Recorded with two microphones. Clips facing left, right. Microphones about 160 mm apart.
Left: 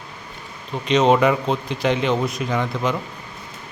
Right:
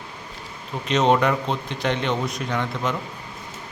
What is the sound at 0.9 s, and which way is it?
A man's voice, centre (ahead or behind).